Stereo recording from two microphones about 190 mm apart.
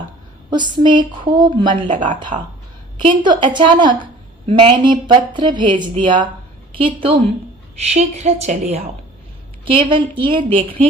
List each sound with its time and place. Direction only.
0.5 s a woman's voice: 25° right (ahead or behind)
9.9 s speech: 25° right (ahead or behind)